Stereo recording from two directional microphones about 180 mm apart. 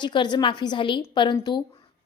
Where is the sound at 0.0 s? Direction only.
25° left (ahead or behind).